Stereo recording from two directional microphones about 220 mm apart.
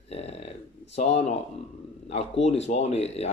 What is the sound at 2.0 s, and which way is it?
Speech, 30° left (ahead or behind).